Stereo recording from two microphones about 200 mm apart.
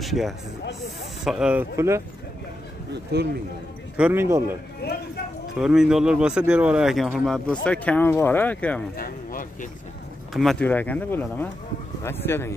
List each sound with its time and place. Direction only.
0.0 s speech: centre (ahead or behind)
2.9 s speech: 55° right (ahead or behind)
3.9 s speech: 10° right (ahead or behind)
4.8 s speech: 55° left (ahead or behind)
5.6 s speech: 5° right (ahead or behind)
8.9 s speech: 45° left (ahead or behind)
10.3 s speech: centre (ahead or behind)